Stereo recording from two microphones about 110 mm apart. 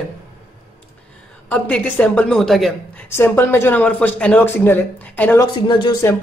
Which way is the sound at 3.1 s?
20° left (ahead or behind).